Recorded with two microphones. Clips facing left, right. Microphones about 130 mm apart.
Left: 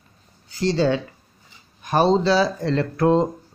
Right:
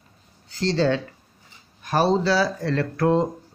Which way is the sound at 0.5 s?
10° left (ahead or behind).